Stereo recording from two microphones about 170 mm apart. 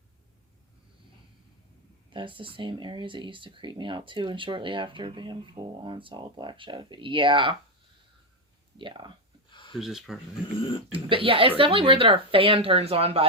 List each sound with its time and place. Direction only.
2.0 s speech: 30° right (ahead or behind)
8.8 s speech: 25° right (ahead or behind)
9.5 s a sound: 30° left (ahead or behind)
9.7 s speech: centre (ahead or behind)
10.9 s speech: 30° right (ahead or behind)